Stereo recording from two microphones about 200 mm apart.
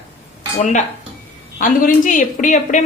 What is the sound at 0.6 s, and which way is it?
Speech, 35° left (ahead or behind).